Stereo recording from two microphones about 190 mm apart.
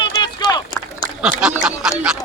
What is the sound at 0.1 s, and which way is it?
Run, 20° left (ahead or behind).